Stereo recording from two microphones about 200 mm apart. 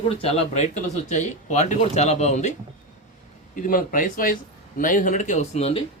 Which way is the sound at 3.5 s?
45° left (ahead or behind).